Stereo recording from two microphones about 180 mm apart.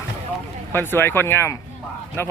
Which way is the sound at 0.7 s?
10° left (ahead or behind).